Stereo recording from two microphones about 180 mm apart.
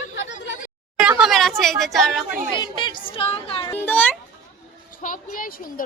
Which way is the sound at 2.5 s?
25° left (ahead or behind).